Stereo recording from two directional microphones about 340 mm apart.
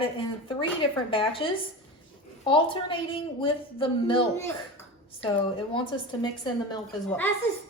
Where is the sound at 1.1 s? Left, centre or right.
Centre.